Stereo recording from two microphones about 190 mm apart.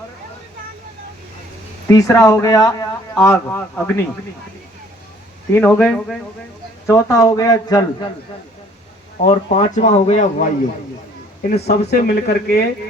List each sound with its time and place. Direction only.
1.9 s a man's voice: 15° left (ahead or behind)
5.5 s a man's voice: 10° left (ahead or behind)
9.2 s speech: 35° left (ahead or behind)
11.4 s speech: 60° left (ahead or behind)